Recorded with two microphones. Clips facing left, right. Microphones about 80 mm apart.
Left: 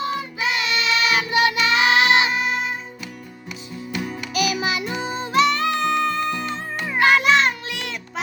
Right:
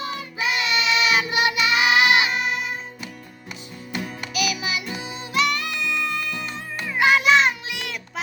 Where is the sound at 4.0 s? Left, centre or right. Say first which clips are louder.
Left 2 dB; centre.